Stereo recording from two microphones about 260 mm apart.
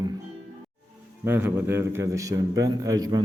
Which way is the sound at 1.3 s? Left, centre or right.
Centre.